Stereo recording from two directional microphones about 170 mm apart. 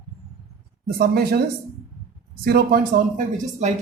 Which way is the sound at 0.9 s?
65° right (ahead or behind).